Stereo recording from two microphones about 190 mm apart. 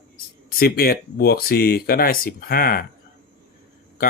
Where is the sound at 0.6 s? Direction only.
55° left (ahead or behind).